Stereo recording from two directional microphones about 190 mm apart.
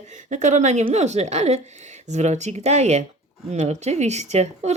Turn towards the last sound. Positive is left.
turn(degrees=-35)  # may be behind; listen again after turning